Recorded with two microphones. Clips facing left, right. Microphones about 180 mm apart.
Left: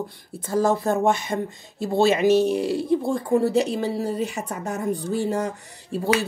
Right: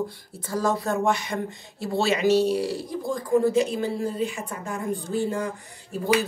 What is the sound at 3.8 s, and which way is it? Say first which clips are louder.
Speech: left 1 dB; 75° left (ahead or behind).